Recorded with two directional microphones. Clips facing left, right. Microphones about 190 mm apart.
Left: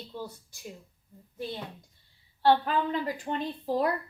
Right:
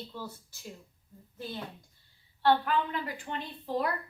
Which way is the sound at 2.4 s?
30° left (ahead or behind).